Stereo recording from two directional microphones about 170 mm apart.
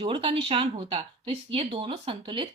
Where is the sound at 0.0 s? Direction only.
30° right (ahead or behind).